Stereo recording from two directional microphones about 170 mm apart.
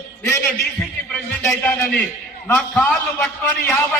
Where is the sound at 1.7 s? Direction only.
15° left (ahead or behind).